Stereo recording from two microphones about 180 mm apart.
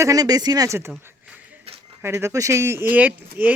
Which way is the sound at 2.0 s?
15° right (ahead or behind).